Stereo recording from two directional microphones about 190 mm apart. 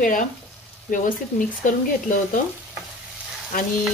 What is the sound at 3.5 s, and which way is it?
Speech, 45° left (ahead or behind).